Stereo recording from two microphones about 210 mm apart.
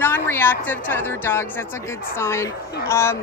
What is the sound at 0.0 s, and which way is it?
A woman's voice, 10° left (ahead or behind).